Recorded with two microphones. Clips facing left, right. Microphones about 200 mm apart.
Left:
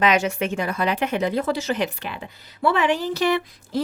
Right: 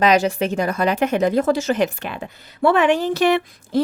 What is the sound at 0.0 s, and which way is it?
Speech, 35° right (ahead or behind).